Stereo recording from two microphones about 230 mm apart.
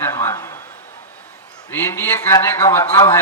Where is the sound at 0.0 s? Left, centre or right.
Centre.